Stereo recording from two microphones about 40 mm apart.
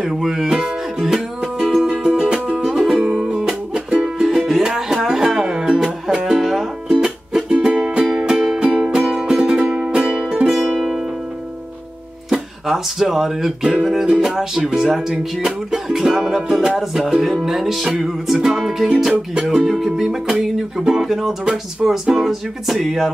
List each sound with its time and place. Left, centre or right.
0.2 s music: centre
3.3 s music: centre
8.5 s music: right
10.6 s music: centre
12.3 s music: centre